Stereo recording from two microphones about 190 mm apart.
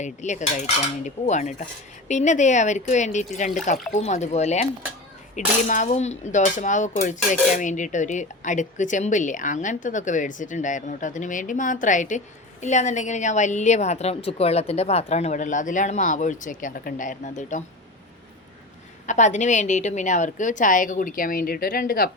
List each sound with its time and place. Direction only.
0.0 s speech: 40° left (ahead or behind)
19.0 s a woman's voice: 40° left (ahead or behind)